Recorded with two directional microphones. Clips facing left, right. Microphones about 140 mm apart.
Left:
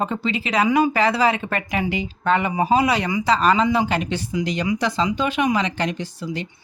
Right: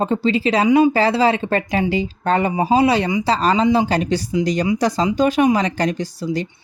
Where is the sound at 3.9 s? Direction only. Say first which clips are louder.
Right 5 dB; 35° right (ahead or behind).